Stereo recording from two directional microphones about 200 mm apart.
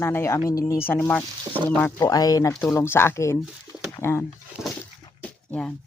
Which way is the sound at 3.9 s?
10° left (ahead or behind).